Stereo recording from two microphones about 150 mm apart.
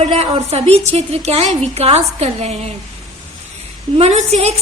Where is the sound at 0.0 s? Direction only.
45° right (ahead or behind).